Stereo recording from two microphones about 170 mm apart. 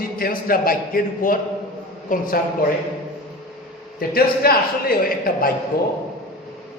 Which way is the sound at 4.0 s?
60° left (ahead or behind).